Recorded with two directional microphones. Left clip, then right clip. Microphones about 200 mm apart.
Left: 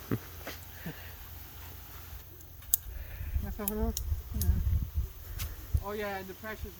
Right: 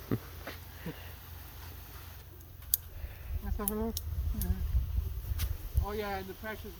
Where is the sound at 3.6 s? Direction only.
10° left (ahead or behind).